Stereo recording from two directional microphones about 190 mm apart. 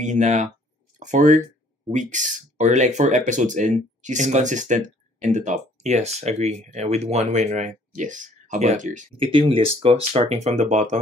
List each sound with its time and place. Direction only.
0.0 s speech: 40° right (ahead or behind)